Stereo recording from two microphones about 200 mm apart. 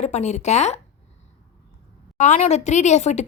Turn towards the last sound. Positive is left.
turn(degrees=35)  # may be behind; listen again after turning